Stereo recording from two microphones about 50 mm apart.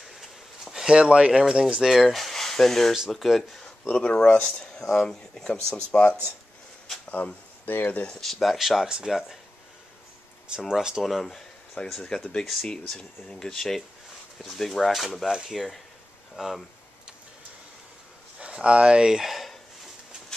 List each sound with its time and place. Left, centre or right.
0.2 s a sound: centre
0.9 s speech: right; by 3.7 s centre
3.8 s speech: centre
4.5 s speech: centre
5.9 s speech: left
7.1 s speech: left
8.2 s speech: centre
8.8 s speech: centre
10.7 s speech: centre
11.1 s speech: centre
18.4 s speech: right; by 19.5 s centre